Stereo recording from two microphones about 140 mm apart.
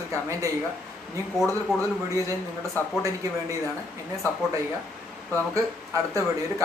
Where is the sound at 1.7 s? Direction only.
Centre (ahead or behind).